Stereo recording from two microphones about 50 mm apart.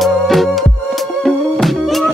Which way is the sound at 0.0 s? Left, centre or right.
Centre.